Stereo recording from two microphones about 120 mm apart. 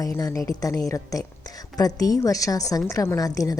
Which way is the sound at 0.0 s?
30° left (ahead or behind).